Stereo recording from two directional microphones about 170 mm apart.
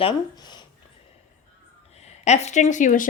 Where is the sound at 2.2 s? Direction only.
40° left (ahead or behind).